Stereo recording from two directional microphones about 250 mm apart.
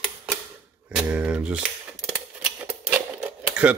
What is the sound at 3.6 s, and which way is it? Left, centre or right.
Speech, centre.